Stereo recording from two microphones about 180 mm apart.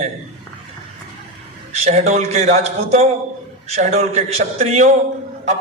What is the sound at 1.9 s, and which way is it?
A man's voice, 40° right (ahead or behind).